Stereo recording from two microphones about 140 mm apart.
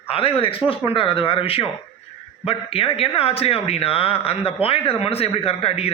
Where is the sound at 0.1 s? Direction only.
40° left (ahead or behind).